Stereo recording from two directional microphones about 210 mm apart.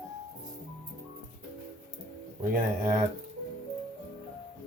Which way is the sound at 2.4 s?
40° right (ahead or behind).